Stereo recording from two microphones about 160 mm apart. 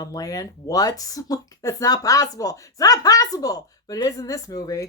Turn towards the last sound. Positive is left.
turn(degrees=20)  # may be behind; listen again after turning